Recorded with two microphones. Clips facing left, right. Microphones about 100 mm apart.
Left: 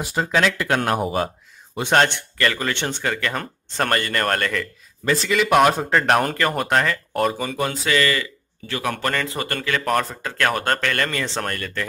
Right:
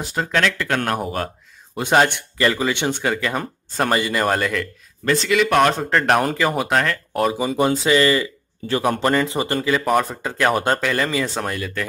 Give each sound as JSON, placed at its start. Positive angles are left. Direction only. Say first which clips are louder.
{"t": 0.0, "sound": "speech", "louder": "left 1 dB", "side_deg": 0}
{"t": 2.0, "sound": "speech", "louder": "right 3 dB", "side_deg": -15}
{"t": 7.3, "sound": "speech", "louder": "right 6 dB", "side_deg": -20}
{"t": 9.1, "sound": "speech", "louder": "right 6 dB", "side_deg": -20}
{"t": 9.7, "sound": "speech", "louder": "right 2 dB", "side_deg": -10}